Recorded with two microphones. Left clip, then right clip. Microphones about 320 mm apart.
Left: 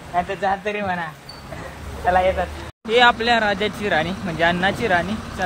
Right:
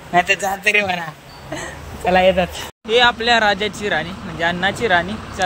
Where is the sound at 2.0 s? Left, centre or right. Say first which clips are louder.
Right 4 dB; right.